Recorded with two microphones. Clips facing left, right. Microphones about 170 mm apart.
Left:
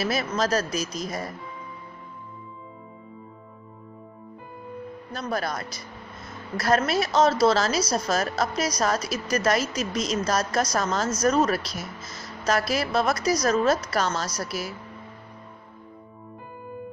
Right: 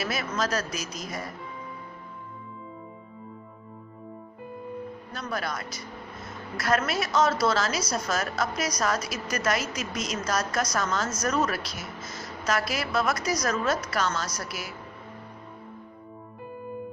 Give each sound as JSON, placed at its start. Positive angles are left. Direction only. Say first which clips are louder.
{"t": 0.0, "sound": "a woman's voice", "louder": "left 4 dB", "side_deg": 35}
{"t": 5.1, "sound": "a woman's voice", "louder": "left 4 dB", "side_deg": 35}